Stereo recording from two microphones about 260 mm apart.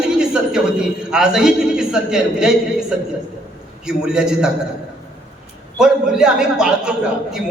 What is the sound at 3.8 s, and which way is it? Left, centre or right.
Speech, centre.